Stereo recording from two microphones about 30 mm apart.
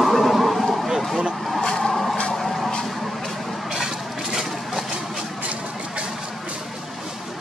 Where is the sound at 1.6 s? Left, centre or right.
Left.